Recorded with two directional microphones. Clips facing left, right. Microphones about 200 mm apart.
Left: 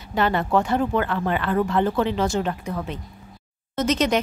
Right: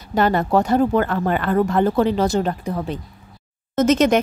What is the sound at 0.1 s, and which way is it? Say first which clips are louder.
Speech: right 4 dB; 40° right (ahead or behind).